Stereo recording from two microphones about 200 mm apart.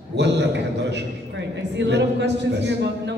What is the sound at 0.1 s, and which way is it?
Speech, 60° right (ahead or behind).